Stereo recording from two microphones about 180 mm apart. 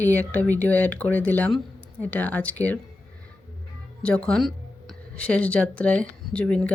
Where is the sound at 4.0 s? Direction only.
5° left (ahead or behind).